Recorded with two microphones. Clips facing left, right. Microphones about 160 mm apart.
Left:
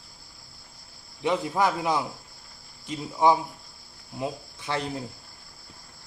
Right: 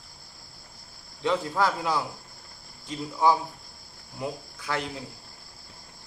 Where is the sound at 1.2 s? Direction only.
15° left (ahead or behind).